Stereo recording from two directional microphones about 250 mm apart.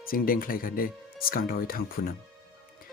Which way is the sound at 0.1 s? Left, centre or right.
Left.